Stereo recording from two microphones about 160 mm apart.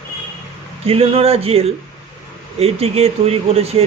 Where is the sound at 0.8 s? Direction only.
35° right (ahead or behind).